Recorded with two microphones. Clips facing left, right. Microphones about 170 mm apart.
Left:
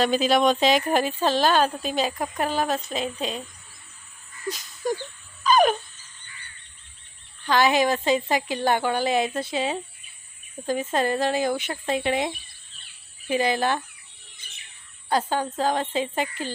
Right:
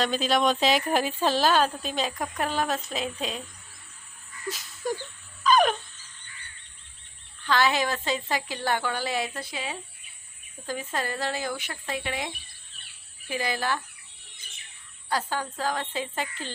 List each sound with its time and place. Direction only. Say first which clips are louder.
0.0 s speech: left 4 dB; 5° left (ahead or behind)
4.4 s a sound: left 3 dB; 5° right (ahead or behind)
7.4 s speech: left 4 dB; 15° left (ahead or behind)
15.1 s speech: left 5 dB; 20° left (ahead or behind)